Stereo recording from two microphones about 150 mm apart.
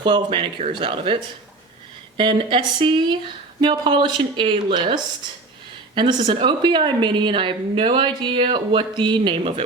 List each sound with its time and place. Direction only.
0.0 s a woman's voice: 35° right (ahead or behind)